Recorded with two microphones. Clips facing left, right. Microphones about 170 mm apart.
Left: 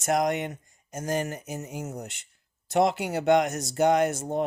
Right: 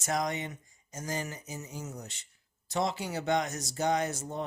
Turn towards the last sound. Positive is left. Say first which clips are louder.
# left 8 dB
turn(degrees=55)  # may be behind; listen again after turning